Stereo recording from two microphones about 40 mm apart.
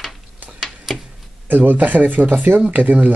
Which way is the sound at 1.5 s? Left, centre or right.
Right.